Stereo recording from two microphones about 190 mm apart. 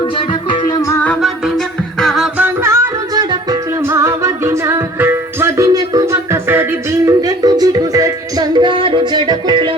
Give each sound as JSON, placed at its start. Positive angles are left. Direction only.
{"t": 0.5, "sound": "music", "side_deg": 15}
{"t": 2.0, "sound": "music", "side_deg": 0}
{"t": 2.6, "sound": "music", "side_deg": -20}